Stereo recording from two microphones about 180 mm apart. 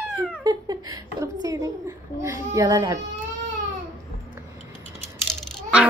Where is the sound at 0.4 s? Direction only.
20° right (ahead or behind).